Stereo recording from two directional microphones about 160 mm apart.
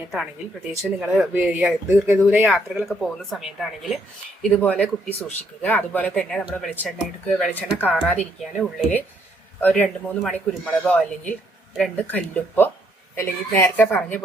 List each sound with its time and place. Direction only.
0.8 s speech: 5° right (ahead or behind)